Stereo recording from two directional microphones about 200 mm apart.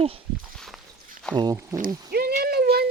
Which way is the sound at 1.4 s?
15° right (ahead or behind).